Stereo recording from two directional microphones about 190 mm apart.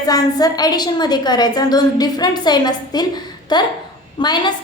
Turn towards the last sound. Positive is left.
turn(degrees=25)  # may be behind; listen again after turning